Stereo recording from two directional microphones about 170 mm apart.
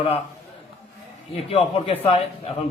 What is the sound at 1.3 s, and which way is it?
A man's voice, 35° left (ahead or behind).